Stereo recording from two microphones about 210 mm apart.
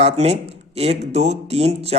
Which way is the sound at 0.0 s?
30° right (ahead or behind).